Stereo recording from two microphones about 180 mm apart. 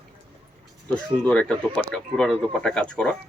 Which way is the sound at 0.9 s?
5° left (ahead or behind).